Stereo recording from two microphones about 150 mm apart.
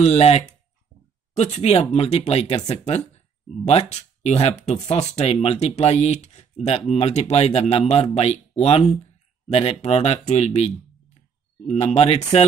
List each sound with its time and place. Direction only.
0.0 s speech: 45° left (ahead or behind)